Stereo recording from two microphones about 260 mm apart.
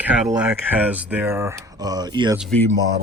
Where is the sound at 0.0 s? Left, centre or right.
Centre.